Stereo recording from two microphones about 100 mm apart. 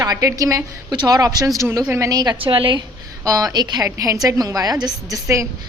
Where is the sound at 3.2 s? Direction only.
35° right (ahead or behind).